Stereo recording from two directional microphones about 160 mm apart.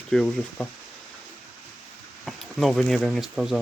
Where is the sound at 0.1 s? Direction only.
5° left (ahead or behind).